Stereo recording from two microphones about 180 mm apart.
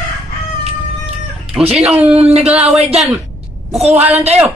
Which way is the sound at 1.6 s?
35° right (ahead or behind).